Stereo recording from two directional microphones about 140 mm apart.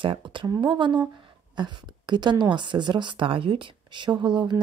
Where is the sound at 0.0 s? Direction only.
35° right (ahead or behind).